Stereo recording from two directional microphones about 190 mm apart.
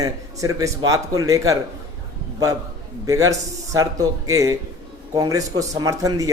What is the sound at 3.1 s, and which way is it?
A man's voice, 15° right (ahead or behind).